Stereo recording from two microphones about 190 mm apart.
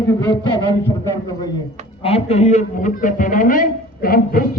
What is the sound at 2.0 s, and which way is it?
A man's voice, 35° left (ahead or behind).